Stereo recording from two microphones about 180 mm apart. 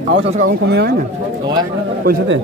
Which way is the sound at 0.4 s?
80° right.